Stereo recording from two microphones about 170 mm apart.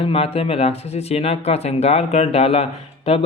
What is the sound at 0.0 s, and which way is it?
A man's voice, 35° left (ahead or behind).